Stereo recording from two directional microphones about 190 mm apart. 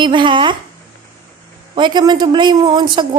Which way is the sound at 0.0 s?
25° right (ahead or behind).